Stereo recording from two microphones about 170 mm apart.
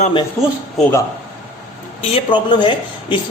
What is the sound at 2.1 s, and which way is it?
Speech, 25° left (ahead or behind).